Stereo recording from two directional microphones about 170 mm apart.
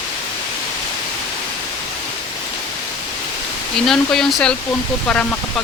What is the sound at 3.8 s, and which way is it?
Speech, centre (ahead or behind).